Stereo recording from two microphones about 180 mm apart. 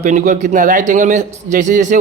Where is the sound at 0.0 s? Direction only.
40° right (ahead or behind).